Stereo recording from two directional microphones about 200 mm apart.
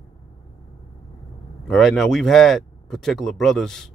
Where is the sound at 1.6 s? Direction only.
Centre (ahead or behind).